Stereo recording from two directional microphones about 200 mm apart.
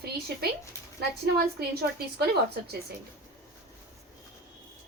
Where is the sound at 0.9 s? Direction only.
55° right (ahead or behind).